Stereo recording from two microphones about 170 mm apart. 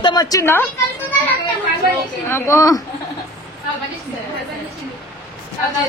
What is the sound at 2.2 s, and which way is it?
Speech, 15° left (ahead or behind).